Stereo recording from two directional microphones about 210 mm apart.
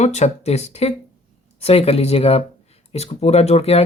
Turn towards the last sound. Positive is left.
turn(degrees=30)  # may be behind; listen again after turning